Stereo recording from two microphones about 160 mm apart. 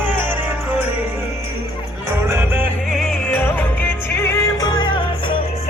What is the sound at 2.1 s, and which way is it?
Music, 15° right (ahead or behind).